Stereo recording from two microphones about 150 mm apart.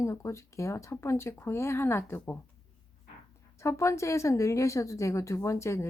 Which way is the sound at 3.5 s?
20° left (ahead or behind).